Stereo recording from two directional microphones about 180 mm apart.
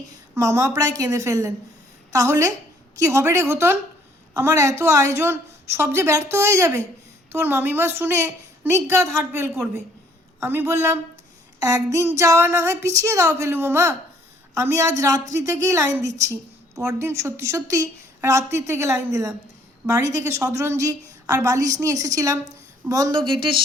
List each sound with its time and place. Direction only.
0.1 s a woman's voice: 15° right (ahead or behind)